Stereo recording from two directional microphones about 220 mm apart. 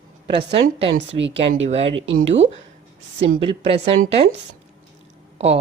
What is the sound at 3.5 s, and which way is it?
Speech, 25° right (ahead or behind).